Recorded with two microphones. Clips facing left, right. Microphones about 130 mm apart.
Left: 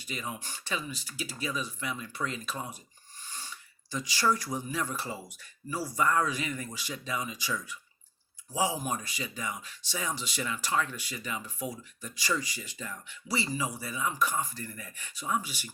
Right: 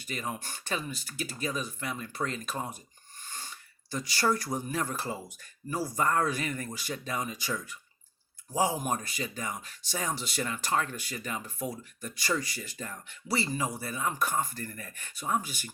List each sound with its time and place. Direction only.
0.0 s speech: 50° right (ahead or behind)
3.2 s a sound: 50° right (ahead or behind)
4.5 s speech: 45° right (ahead or behind)